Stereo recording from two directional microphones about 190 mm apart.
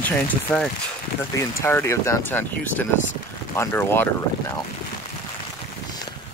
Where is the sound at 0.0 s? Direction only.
10° left (ahead or behind).